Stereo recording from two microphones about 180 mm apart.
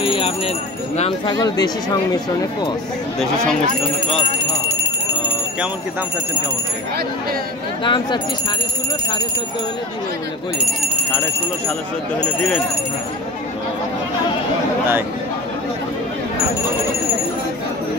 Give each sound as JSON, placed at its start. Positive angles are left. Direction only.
{"t": 0.0, "sound": "jingle bell", "side_deg": 30}
{"t": 0.9, "sound": "speech", "side_deg": 35}
{"t": 1.3, "sound": "speech", "side_deg": 20}
{"t": 7.8, "sound": "speech", "side_deg": 25}